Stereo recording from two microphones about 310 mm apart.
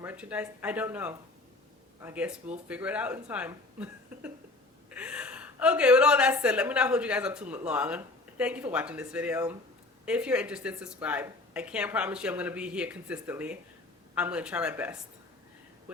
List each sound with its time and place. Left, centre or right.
0.0 s a woman's voice: centre